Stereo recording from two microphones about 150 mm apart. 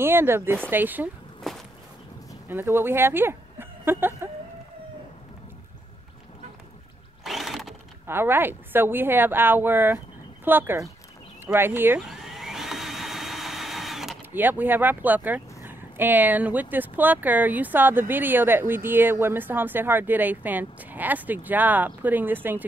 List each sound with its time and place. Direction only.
0.0 s speech: 15° right (ahead or behind)
1.5 s a sound: centre (ahead or behind)
2.4 s speech: 15° right (ahead or behind)
7.2 s sewing machine: centre (ahead or behind)
8.1 s speech: 15° right (ahead or behind)
12.0 s vehicle: centre (ahead or behind)
14.3 s speech: 15° right (ahead or behind)